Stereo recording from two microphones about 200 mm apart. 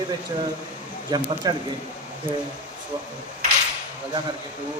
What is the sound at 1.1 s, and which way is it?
Speech, 20° right (ahead or behind).